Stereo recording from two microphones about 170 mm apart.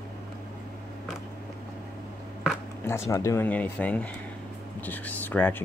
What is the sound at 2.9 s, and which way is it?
Speech, 15° left (ahead or behind).